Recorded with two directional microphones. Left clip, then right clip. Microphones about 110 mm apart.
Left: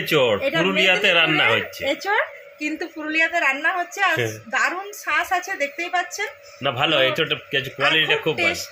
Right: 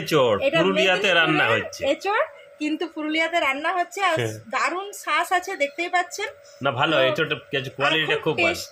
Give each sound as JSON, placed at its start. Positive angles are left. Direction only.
{"t": 0.1, "sound": "speech", "side_deg": 0}
{"t": 2.6, "sound": "a woman's voice", "side_deg": -15}
{"t": 6.6, "sound": "a woman's voice", "side_deg": 0}
{"t": 8.0, "sound": "speech", "side_deg": 0}
{"t": 8.4, "sound": "a woman's voice", "side_deg": -10}